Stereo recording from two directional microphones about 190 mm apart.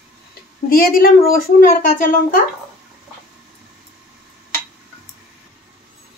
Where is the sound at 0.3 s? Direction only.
50° left (ahead or behind).